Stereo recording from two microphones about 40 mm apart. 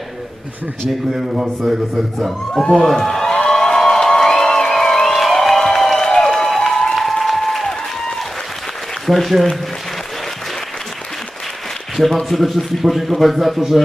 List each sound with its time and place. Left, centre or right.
0.8 s speech: centre
3.1 s crowd: centre
9.0 s speech: centre
12.0 s speech: centre